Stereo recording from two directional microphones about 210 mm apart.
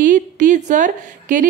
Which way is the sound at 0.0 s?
35° right (ahead or behind).